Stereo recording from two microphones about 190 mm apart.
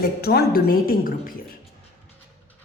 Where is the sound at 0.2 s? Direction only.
55° left (ahead or behind).